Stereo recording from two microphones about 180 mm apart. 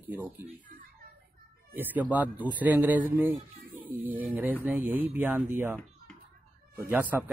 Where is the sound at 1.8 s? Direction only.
10° right (ahead or behind).